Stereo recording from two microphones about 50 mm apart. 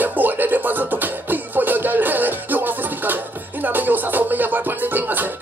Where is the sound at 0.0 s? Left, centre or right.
Right.